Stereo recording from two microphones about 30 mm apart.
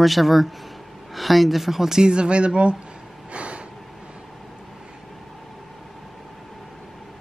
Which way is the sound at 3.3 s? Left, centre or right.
Right.